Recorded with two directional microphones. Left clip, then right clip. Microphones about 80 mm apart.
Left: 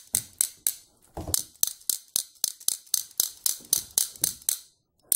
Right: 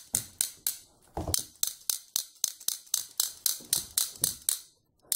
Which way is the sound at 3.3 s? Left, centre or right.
Centre.